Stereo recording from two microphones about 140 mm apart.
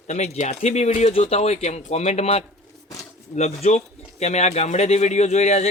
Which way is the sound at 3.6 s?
50° left (ahead or behind).